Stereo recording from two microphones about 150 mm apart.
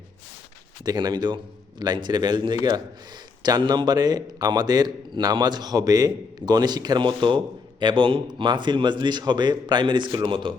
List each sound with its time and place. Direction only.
0.9 s a man's voice: 25° right (ahead or behind)